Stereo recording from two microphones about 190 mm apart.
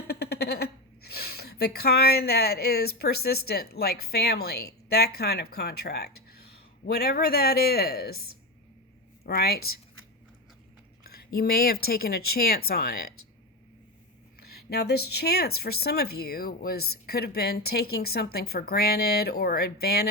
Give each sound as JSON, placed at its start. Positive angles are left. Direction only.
{"t": 0.1, "sound": "speech", "side_deg": 60}
{"t": 11.2, "sound": "speech", "side_deg": 55}
{"t": 14.4, "sound": "speech", "side_deg": 55}